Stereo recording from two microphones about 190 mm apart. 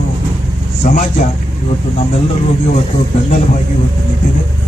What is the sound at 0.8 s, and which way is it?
Speech, 40° left (ahead or behind).